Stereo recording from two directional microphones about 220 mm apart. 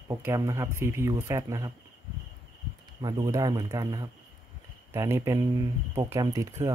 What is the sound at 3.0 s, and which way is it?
Speech, 15° right (ahead or behind).